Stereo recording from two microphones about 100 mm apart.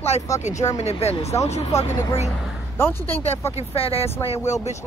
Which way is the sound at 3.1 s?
90° left.